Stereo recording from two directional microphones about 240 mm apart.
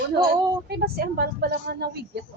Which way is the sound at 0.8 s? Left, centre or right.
Right.